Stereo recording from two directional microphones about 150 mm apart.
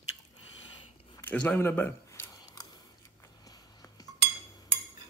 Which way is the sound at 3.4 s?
25° left (ahead or behind).